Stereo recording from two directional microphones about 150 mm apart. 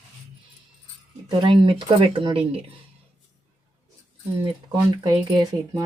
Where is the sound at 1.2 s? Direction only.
30° right (ahead or behind).